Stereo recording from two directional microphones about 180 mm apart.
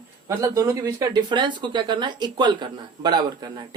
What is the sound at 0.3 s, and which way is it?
Speech, 20° right (ahead or behind).